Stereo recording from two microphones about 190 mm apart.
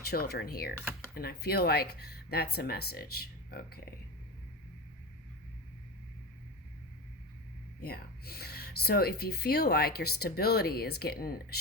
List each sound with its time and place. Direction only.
0.0 s speech: 55° left (ahead or behind)
7.8 s speech: 55° left (ahead or behind)